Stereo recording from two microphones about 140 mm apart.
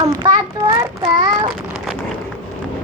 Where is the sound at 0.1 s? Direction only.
30° right (ahead or behind).